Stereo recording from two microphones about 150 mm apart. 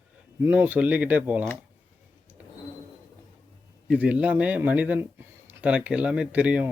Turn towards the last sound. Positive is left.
turn(degrees=-10)  # may be behind; listen again after turning